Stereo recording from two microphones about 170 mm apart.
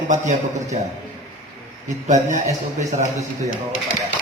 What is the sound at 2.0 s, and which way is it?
A man's voice, 45° right (ahead or behind).